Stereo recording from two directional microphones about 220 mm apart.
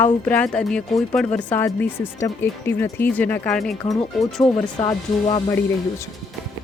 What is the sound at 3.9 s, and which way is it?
Speech, 20° left (ahead or behind).